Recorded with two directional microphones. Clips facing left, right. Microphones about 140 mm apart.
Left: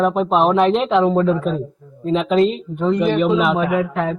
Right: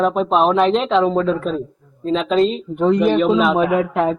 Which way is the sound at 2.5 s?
20° right (ahead or behind).